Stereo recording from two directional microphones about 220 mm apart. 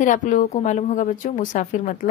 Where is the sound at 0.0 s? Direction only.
35° left (ahead or behind).